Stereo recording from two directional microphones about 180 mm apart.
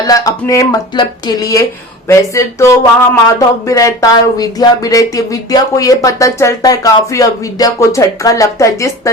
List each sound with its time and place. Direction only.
0.1 s speech: 20° left (ahead or behind)